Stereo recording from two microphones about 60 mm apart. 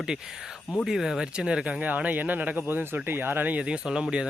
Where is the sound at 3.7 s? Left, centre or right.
Centre.